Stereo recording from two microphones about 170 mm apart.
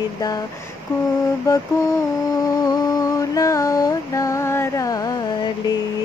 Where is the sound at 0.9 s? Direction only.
15° left (ahead or behind).